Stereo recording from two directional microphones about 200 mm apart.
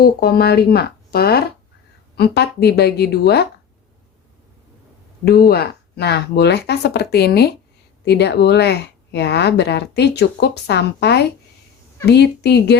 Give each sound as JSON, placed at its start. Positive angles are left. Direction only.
{"t": 0.0, "sound": "speech", "side_deg": 50}
{"t": 5.2, "sound": "speech", "side_deg": 50}